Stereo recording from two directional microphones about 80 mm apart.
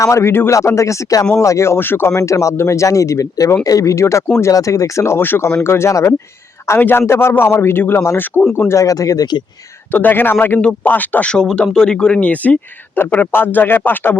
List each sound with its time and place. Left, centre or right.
0.0 s speech: left
6.7 s speech: left
9.9 s speech: left